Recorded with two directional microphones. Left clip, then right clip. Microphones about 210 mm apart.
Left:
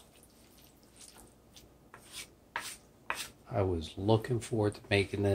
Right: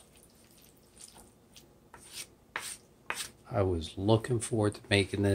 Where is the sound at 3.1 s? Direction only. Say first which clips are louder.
Even; 15° right (ahead or behind).